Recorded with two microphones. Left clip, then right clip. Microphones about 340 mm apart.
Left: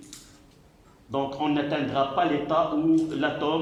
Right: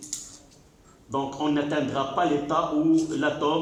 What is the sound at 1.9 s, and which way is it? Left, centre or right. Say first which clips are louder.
Speech: left 3 dB; centre.